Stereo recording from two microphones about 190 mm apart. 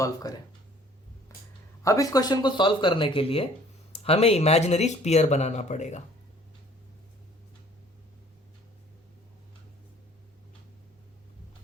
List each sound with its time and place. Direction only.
0.0 s speech: 20° left (ahead or behind)
1.8 s speech: 15° left (ahead or behind); by 6.0 s 35° left (ahead or behind)